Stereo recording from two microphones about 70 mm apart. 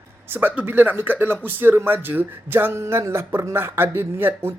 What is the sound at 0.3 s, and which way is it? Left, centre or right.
Speech, right.